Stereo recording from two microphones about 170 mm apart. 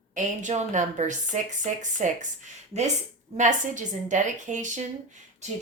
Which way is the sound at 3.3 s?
45° right (ahead or behind).